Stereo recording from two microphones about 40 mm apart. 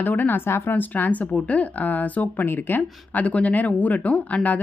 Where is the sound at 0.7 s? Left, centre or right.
Left.